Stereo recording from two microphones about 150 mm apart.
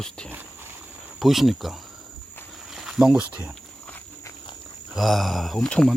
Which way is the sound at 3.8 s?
10° left (ahead or behind).